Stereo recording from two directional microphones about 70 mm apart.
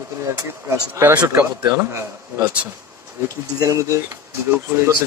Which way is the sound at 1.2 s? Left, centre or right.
Right.